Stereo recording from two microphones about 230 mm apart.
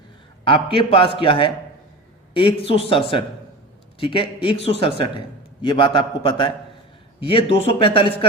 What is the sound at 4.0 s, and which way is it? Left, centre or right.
Speech, left.